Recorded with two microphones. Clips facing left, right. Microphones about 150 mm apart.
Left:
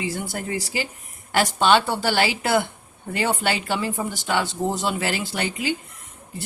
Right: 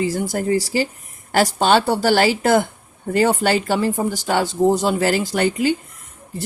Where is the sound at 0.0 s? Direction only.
40° right (ahead or behind).